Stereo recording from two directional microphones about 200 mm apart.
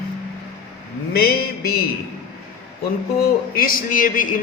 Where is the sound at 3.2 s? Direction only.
45° left (ahead or behind).